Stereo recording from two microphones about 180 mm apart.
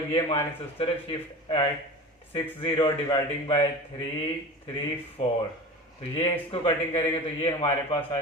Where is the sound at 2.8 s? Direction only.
25° left (ahead or behind).